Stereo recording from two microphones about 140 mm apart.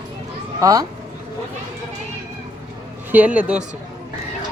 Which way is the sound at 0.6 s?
25° right (ahead or behind).